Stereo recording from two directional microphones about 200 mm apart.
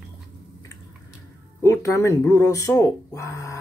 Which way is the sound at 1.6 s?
15° left (ahead or behind).